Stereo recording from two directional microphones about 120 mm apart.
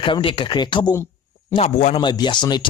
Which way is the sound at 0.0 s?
45° left (ahead or behind).